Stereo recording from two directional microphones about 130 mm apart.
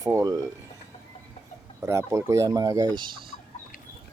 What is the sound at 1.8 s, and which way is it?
Speech, 20° right (ahead or behind).